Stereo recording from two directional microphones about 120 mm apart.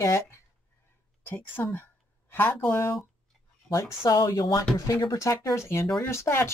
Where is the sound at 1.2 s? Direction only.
15° left (ahead or behind).